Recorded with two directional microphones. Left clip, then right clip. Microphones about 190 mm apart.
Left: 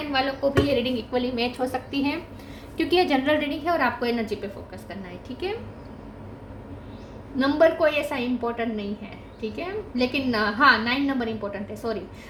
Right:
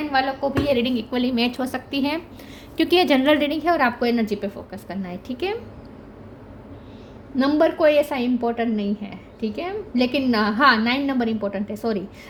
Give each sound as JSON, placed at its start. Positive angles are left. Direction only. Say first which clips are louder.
{"t": 0.1, "sound": "a woman's voice", "louder": "right 1 dB", "side_deg": -50}
{"t": 7.3, "sound": "a woman's voice", "louder": "right 1 dB", "side_deg": -45}